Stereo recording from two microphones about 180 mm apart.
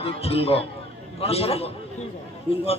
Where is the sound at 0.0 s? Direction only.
35° left (ahead or behind).